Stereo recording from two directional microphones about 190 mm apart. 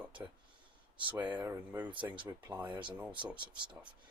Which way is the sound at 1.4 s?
10° right (ahead or behind).